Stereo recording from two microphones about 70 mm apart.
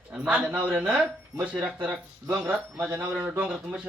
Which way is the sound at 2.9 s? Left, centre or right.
Right.